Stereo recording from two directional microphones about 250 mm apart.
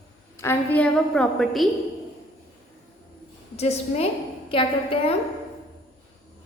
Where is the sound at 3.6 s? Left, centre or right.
Left.